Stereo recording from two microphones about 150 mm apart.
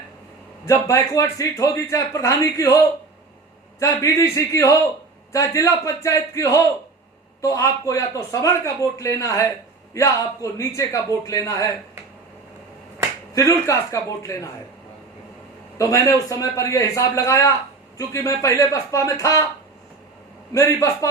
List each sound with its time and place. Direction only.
0.6 s speech: 20° left (ahead or behind)
13.3 s speech: 20° left (ahead or behind)
15.8 s speech: 20° left (ahead or behind)
20.5 s speech: 20° left (ahead or behind)